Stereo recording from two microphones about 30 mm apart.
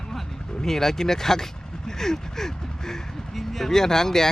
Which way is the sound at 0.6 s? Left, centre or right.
Centre.